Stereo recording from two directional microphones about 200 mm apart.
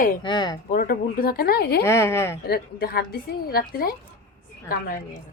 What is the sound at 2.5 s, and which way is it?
A woman's voice, 50° left (ahead or behind).